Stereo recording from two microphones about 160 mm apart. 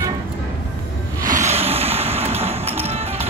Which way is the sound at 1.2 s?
50° right (ahead or behind).